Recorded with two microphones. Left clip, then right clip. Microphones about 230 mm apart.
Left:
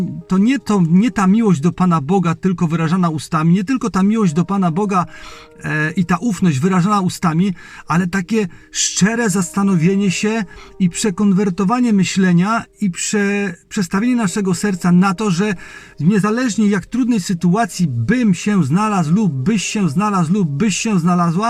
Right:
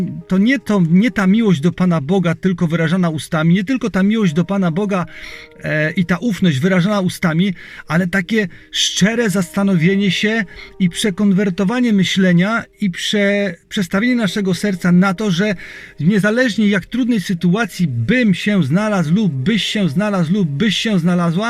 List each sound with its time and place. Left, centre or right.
0.3 s speech: left